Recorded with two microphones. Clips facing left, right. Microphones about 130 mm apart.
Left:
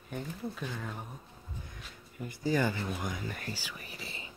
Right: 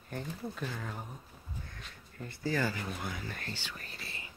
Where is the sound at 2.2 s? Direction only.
15° left (ahead or behind).